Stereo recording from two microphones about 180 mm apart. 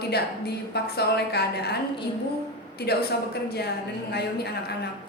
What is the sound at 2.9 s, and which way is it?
Speech, 60° left (ahead or behind).